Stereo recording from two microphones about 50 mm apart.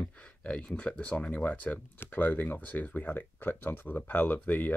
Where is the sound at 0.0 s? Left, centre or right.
Left.